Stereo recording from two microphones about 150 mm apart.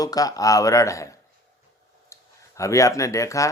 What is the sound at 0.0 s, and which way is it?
Speech, 25° left (ahead or behind).